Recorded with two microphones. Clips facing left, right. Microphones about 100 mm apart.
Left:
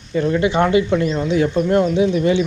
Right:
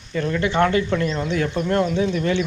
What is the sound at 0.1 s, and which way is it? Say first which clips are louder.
Speech: left 5 dB; 20° left (ahead or behind).